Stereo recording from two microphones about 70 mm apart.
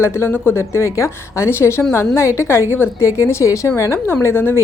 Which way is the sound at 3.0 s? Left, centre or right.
Left.